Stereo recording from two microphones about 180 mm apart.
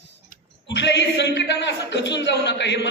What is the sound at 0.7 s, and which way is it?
A man's voice, 75° left (ahead or behind).